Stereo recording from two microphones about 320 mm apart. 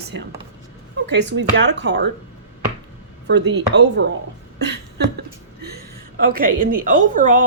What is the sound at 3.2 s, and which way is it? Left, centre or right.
Speech, right.